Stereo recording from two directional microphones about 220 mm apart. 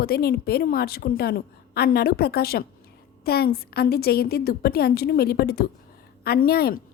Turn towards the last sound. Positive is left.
turn(degrees=45)  # may be behind; listen again after turning